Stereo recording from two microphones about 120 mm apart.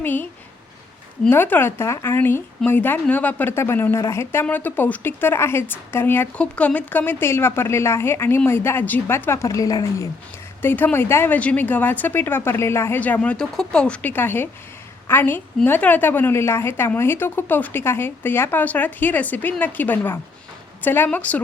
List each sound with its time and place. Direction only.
0.0 s a woman's voice: 15° left (ahead or behind)
1.3 s a woman's voice: 15° left (ahead or behind)
10.6 s a woman's voice: 15° left (ahead or behind)
13.0 s a woman's voice: 10° left (ahead or behind)